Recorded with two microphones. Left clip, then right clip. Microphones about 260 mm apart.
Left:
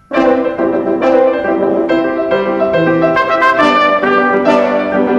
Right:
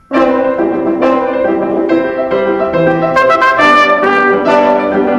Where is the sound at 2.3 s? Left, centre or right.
Centre.